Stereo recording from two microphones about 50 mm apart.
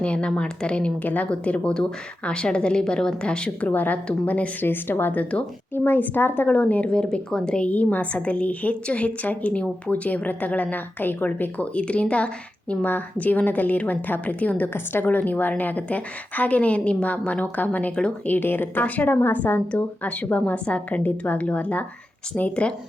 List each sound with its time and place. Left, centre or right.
0.0 s speech: left
1.0 s a woman's voice: left
3.7 s a woman's voice: left
4.6 s a woman's voice: left
6.9 s speech: centre
7.7 s a woman's voice: left
14.7 s a woman's voice: left
18.3 s a woman's voice: left
19.7 s speech: left